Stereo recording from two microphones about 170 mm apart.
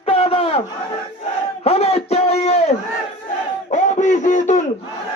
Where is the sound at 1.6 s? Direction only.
35° left (ahead or behind).